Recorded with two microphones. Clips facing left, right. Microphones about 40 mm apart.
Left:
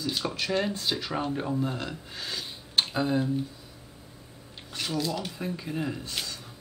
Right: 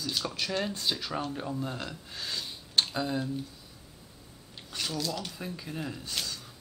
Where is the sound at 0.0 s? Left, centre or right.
Centre.